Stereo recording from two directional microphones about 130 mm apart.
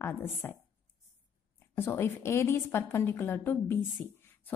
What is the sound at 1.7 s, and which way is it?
A woman's voice, 20° left (ahead or behind).